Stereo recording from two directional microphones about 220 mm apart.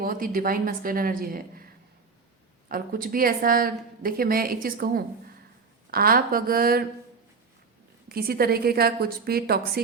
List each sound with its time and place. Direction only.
0.0 s a woman's voice: 40° right (ahead or behind)
2.6 s a woman's voice: 40° right (ahead or behind)
8.1 s a woman's voice: 45° right (ahead or behind)